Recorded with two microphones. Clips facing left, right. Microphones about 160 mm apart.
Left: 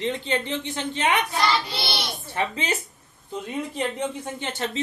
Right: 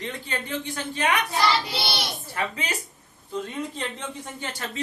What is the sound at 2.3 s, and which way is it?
Speech, 25° left (ahead or behind).